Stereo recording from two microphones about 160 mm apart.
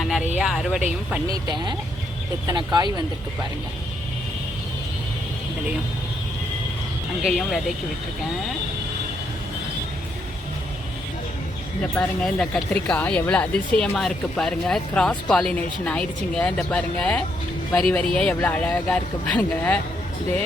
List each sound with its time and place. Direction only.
0.0 s a sound: centre (ahead or behind)
0.3 s speech: centre (ahead or behind)
1.5 s speech: 30° right (ahead or behind)
7.2 s speech: centre (ahead or behind)
11.8 s speech: 5° left (ahead or behind)